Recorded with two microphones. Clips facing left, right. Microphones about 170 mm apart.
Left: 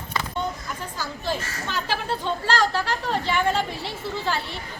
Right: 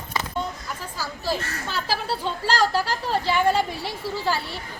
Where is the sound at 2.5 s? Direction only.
10° right (ahead or behind).